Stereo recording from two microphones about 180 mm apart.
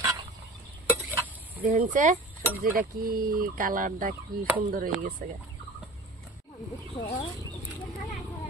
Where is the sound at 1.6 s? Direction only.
45° right (ahead or behind).